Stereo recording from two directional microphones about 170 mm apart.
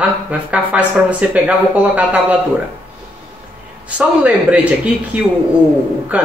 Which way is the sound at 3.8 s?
10° right (ahead or behind).